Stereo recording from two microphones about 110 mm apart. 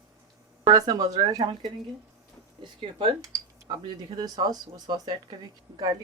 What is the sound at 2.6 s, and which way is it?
Speech, 50° right (ahead or behind).